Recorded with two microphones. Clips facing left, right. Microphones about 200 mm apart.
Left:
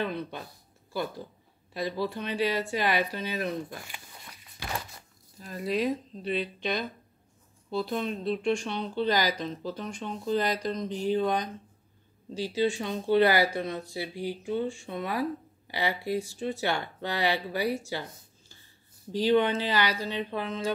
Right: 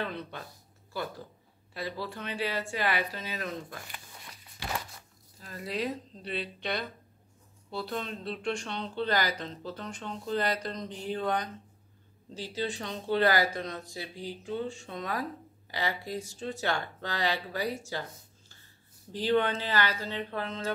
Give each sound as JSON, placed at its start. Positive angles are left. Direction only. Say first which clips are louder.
{"t": 0.0, "sound": "speech", "louder": "left 4 dB", "side_deg": 15}
{"t": 1.7, "sound": "speech", "louder": "left 6 dB", "side_deg": 15}
{"t": 5.4, "sound": "speech", "louder": "left 5 dB", "side_deg": 15}
{"t": 19.1, "sound": "speech", "louder": "left 4 dB", "side_deg": 15}